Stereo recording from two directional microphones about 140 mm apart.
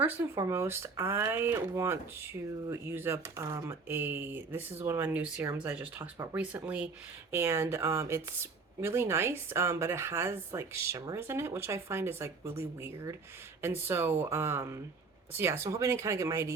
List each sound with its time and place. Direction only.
0.0 s speech: 15° right (ahead or behind)